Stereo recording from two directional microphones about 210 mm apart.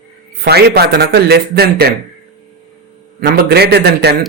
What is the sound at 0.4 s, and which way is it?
Speech, 50° right (ahead or behind).